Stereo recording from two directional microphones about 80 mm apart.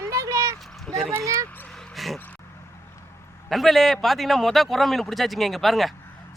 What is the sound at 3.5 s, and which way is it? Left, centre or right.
Speech, centre.